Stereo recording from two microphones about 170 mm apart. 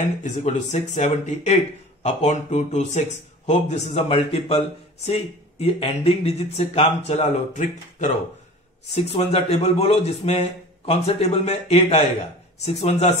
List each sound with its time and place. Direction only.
0.2 s a man's voice: 40° left (ahead or behind)